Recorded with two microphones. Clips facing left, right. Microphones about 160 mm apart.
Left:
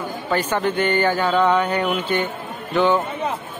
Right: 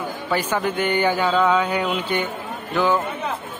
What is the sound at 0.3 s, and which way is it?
A man's voice, 10° right (ahead or behind).